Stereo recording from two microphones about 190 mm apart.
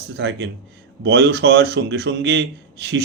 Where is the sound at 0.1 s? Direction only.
60° right (ahead or behind).